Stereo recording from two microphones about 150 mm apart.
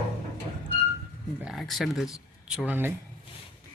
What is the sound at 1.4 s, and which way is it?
Speech, 5° right (ahead or behind).